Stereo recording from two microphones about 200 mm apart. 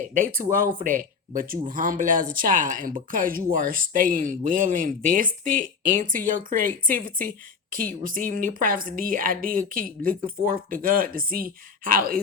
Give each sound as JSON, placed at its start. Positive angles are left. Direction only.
{"t": 0.9, "sound": "speech", "side_deg": -40}